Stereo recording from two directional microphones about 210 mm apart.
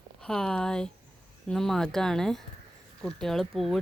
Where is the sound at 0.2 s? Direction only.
5° left (ahead or behind).